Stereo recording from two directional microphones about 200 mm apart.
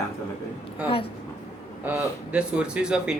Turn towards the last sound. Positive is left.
turn(degrees=-5)  # may be behind; listen again after turning